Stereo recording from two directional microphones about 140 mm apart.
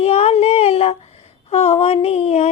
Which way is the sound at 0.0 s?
45° left (ahead or behind).